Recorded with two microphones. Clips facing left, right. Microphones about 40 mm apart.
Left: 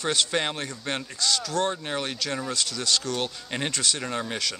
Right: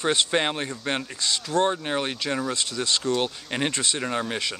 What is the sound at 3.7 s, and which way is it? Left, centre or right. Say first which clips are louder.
Speech: right 2 dB; right.